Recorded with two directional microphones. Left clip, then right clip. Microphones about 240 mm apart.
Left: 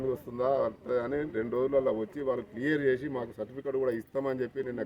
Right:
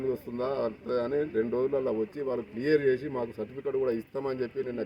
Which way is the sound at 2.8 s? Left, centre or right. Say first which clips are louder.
Right 1 dB; left.